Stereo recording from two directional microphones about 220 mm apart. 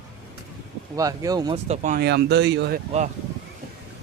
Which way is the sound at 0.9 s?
15° right (ahead or behind).